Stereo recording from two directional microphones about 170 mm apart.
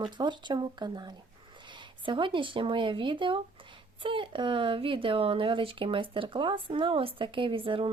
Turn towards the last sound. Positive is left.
turn(degrees=-30)  # may be behind; listen again after turning